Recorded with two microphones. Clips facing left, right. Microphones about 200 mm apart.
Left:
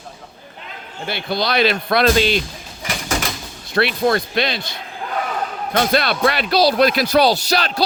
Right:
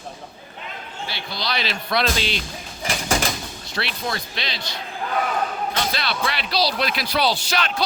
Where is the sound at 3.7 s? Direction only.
55° left (ahead or behind).